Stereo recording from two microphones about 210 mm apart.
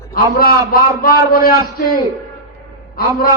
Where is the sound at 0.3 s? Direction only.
45° left (ahead or behind).